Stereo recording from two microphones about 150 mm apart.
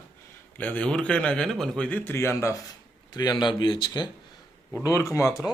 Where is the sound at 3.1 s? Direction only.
30° left (ahead or behind).